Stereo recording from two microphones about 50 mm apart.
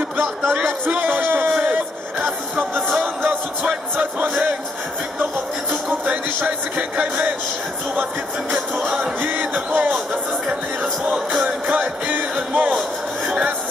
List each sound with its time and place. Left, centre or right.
0.7 s music: right
3.9 s music: right
5.7 s a sound: right
8.5 s music: centre
9.2 s music: right
11.4 s music: right